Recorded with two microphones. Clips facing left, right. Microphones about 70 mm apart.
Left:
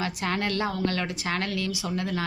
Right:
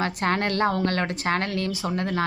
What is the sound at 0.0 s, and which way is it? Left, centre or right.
Speech, right.